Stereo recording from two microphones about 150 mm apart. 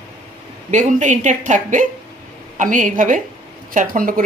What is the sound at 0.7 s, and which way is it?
Speech, 55° right (ahead or behind).